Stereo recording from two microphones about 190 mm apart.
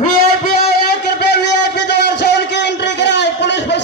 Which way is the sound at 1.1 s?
60° left (ahead or behind).